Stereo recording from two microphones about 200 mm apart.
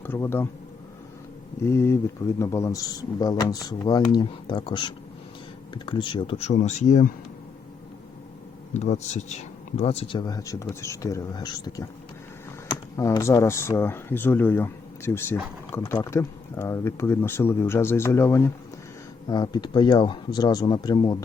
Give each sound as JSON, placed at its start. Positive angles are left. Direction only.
{"t": 0.0, "sound": "speech", "side_deg": 10}
{"t": 1.6, "sound": "speech", "side_deg": 15}
{"t": 8.7, "sound": "speech", "side_deg": 35}